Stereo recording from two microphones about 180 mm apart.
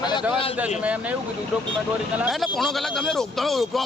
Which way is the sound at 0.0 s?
25° left (ahead or behind).